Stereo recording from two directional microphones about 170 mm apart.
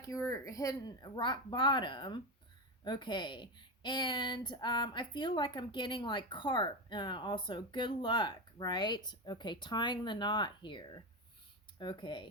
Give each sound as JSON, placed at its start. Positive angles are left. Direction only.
{"t": 0.0, "sound": "a woman's voice", "side_deg": 20}